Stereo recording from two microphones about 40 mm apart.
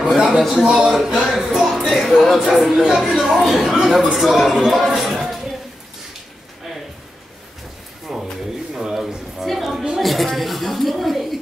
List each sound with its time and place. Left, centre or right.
0.1 s a sound: centre
0.4 s speech: centre
0.7 s speech: centre
1.0 s speech: centre
1.4 s music: centre
1.8 s speech: centre
8.1 s a sound: centre